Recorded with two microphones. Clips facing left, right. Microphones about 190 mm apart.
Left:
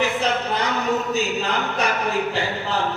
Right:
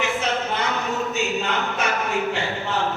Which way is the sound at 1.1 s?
35° left (ahead or behind).